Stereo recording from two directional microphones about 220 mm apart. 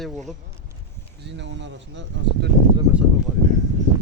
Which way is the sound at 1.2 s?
55° right (ahead or behind).